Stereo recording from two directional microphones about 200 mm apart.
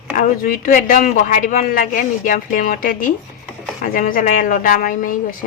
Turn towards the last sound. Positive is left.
turn(degrees=45)  # may be behind; listen again after turning